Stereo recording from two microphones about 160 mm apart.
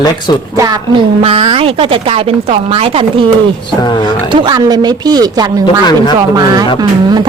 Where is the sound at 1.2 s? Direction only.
35° right (ahead or behind).